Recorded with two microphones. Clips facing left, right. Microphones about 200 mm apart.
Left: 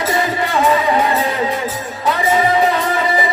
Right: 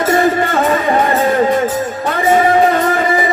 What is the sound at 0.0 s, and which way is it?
Music, 50° right (ahead or behind).